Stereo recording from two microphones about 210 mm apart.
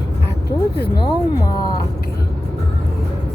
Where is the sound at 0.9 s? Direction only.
20° left (ahead or behind).